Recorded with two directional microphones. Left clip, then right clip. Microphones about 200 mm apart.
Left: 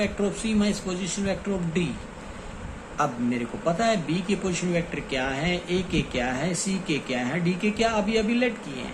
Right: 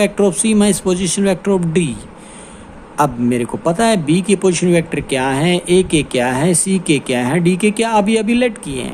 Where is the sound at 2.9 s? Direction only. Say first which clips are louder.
Right 11 dB; 60° right (ahead or behind).